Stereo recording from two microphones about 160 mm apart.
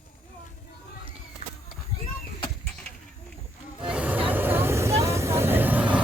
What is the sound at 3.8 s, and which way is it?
Music, 5° right (ahead or behind).